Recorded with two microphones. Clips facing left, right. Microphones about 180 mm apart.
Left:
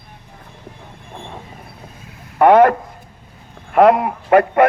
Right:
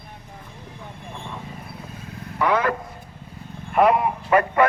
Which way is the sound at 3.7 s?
80° left.